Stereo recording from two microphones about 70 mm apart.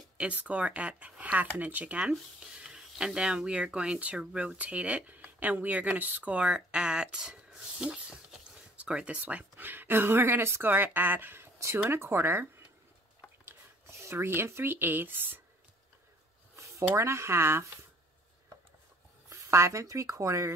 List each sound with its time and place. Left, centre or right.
0.2 s speech: centre
2.6 s speech: centre; by 15.4 s right
16.9 s speech: right
19.2 s speech: right